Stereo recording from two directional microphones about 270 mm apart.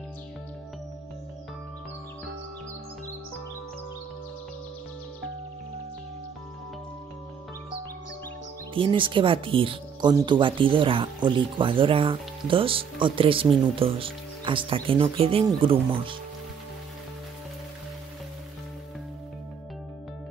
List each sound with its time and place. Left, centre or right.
8.7 s speech: centre